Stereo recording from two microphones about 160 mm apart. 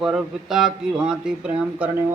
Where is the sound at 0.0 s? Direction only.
Centre (ahead or behind).